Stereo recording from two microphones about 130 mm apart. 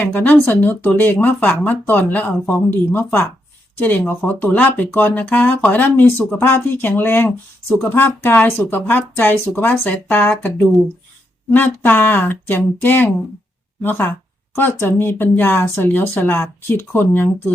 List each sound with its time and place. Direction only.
0.0 s speech: 15° left (ahead or behind)
11.5 s speech: 15° left (ahead or behind)